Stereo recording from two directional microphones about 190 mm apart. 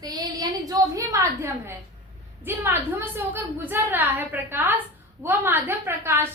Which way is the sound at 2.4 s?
10° right (ahead or behind).